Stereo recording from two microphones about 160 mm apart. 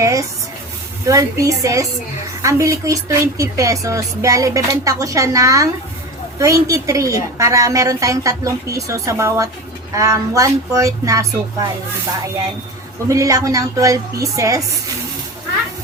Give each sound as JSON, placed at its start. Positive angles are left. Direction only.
{"t": 0.0, "sound": "a sound", "side_deg": -20}
{"t": 1.0, "sound": "speech", "side_deg": -20}
{"t": 13.1, "sound": "speech", "side_deg": -20}